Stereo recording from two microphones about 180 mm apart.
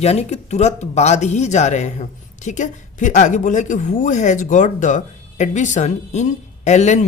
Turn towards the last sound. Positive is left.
turn(degrees=40)  # may be behind; listen again after turning